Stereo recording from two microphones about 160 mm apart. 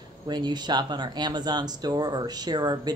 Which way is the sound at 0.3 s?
25° right (ahead or behind).